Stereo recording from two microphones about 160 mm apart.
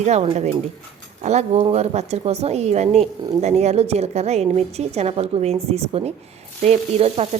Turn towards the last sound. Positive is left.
turn(degrees=-40)  # may be behind; listen again after turning